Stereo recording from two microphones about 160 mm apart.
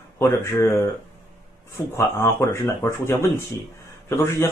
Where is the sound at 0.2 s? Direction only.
15° left (ahead or behind).